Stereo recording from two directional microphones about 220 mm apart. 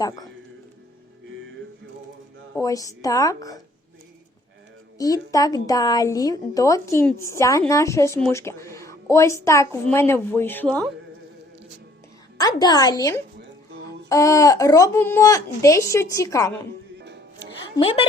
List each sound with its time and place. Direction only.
2.6 s speech: 15° left (ahead or behind)
4.9 s speech: 15° left (ahead or behind)
12.4 s a woman's voice: 15° left (ahead or behind)
17.0 s music: 50° right (ahead or behind)
17.7 s a woman's voice: 25° left (ahead or behind)